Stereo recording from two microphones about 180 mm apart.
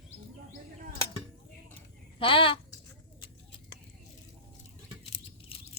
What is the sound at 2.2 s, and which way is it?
Speech, 30° left (ahead or behind).